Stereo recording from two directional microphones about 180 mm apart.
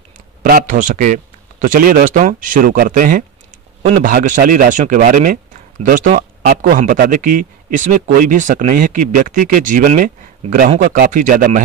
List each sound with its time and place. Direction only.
0.4 s speech: 50° right (ahead or behind)